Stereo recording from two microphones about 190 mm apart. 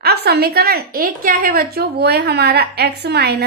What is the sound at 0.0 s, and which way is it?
A woman's voice, 60° right (ahead or behind).